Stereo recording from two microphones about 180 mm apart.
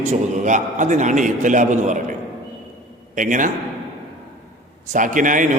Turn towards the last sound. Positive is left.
turn(degrees=-45)  # may be behind; listen again after turning